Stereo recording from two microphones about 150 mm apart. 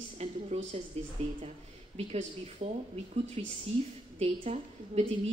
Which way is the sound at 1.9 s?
45° right (ahead or behind).